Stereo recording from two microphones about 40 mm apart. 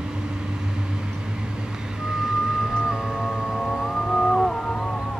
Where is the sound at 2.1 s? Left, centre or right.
Centre.